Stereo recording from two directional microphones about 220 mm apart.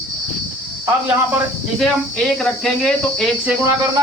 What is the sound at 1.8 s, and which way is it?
Speech, centre (ahead or behind).